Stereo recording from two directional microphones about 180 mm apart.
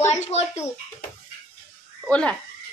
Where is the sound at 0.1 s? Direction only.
35° left (ahead or behind).